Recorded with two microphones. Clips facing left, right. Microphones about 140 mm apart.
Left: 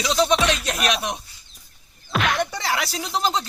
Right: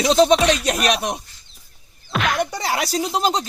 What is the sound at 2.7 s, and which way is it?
Speech, 45° right (ahead or behind).